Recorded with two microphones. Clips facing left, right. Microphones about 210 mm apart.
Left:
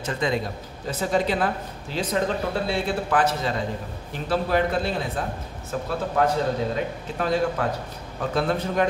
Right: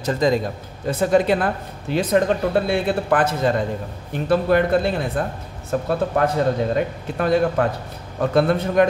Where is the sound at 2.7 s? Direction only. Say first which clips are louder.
Right 5 dB; 55° right (ahead or behind).